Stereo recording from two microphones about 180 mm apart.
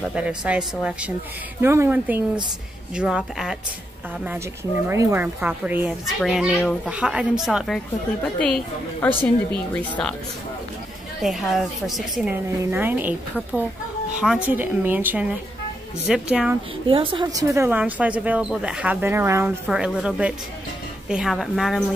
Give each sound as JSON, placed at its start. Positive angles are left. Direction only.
{"t": 0.0, "sound": "a woman's voice", "side_deg": -5}
{"t": 4.8, "sound": "a woman's voice", "side_deg": -15}
{"t": 11.2, "sound": "a woman's voice", "side_deg": 0}
{"t": 16.8, "sound": "a woman's voice", "side_deg": -30}